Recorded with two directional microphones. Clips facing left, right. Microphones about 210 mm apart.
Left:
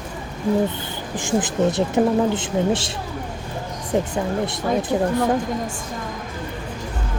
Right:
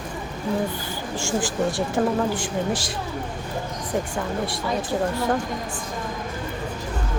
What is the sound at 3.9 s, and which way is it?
Speech, 25° left (ahead or behind).